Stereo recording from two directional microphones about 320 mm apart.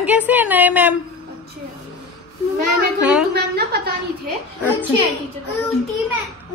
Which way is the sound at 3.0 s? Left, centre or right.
Centre.